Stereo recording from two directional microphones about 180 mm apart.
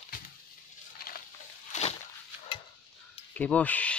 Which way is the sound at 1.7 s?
45° left (ahead or behind).